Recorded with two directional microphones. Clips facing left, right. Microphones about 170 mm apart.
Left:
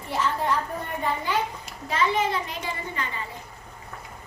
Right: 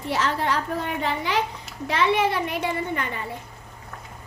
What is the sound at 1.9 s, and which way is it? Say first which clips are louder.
A child's voice: right 3 dB; 70° right (ahead or behind).